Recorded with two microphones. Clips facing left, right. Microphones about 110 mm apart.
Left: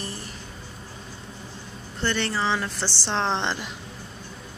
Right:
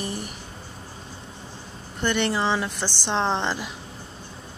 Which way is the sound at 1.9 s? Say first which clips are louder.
Right 3 dB; 15° right (ahead or behind).